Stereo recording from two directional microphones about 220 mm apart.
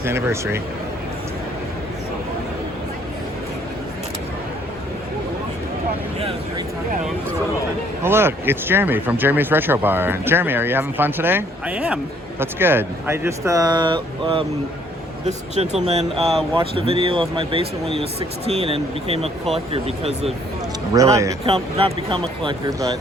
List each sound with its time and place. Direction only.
0.0 s speech: 10° right (ahead or behind)
8.0 s speech: 10° right (ahead or behind); by 20.3 s 25° right (ahead or behind)
20.9 s speech: 15° right (ahead or behind)
21.4 s speech: 25° right (ahead or behind)